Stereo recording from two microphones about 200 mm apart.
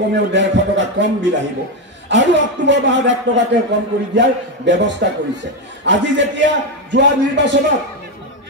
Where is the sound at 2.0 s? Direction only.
65° right (ahead or behind).